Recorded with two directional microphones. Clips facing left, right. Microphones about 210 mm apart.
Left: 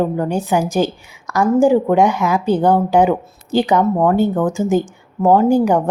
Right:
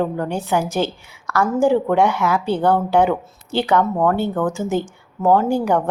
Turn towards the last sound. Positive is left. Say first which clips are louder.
# left 4 dB
turn(degrees=15)  # may be behind; listen again after turning